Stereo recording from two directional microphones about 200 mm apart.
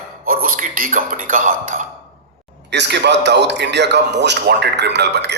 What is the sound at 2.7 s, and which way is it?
A man's voice, 60° right (ahead or behind).